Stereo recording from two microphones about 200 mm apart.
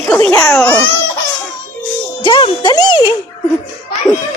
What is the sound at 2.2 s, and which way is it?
Speech, 25° left (ahead or behind).